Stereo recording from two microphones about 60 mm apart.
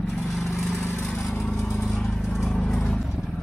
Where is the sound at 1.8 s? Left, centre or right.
Centre.